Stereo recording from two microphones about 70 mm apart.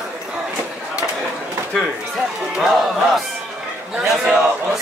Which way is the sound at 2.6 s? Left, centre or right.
Centre.